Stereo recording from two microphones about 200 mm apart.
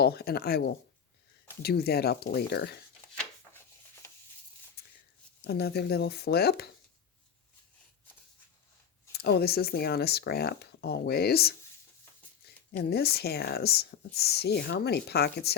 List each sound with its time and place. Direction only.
0.0 s speech: 50° left (ahead or behind)
4.8 s a sound: 55° left (ahead or behind)
5.4 s speech: 50° left (ahead or behind)
9.1 s speech: 55° left (ahead or behind)
12.7 s speech: 55° left (ahead or behind)